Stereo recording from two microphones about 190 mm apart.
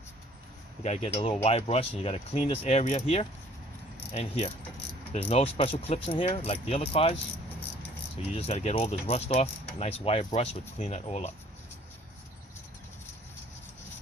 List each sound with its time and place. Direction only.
0.8 s speech: 35° left (ahead or behind)